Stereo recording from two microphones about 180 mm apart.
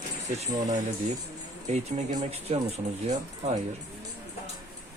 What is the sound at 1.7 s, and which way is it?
Speech, 35° right (ahead or behind).